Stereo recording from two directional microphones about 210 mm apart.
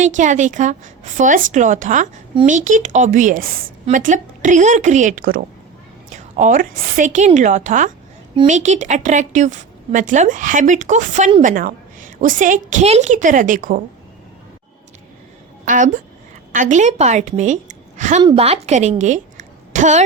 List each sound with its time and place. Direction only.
0.0 s a woman's voice: 35° right (ahead or behind)
15.6 s a woman's voice: 40° right (ahead or behind)
18.2 s a woman's voice: 25° right (ahead or behind)